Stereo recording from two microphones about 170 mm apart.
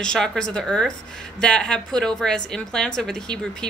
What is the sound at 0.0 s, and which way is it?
Speech, 5° left (ahead or behind).